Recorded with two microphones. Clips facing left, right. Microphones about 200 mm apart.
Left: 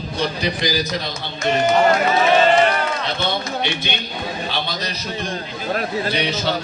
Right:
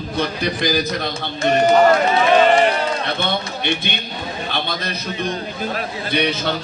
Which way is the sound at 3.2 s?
55° right (ahead or behind).